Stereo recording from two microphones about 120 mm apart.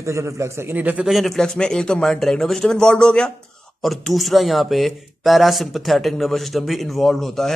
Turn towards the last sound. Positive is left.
turn(degrees=5)  # may be behind; listen again after turning